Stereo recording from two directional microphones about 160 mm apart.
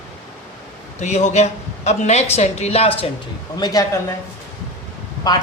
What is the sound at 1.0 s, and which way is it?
A woman's voice, 45° left (ahead or behind).